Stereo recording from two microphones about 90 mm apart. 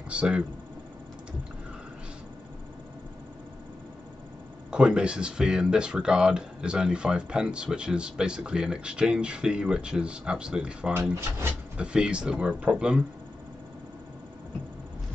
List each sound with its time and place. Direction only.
0.1 s speech: 10° right (ahead or behind)
4.6 s speech: 10° right (ahead or behind)
11.1 s speech: 30° right (ahead or behind)
11.7 s speech: 10° right (ahead or behind)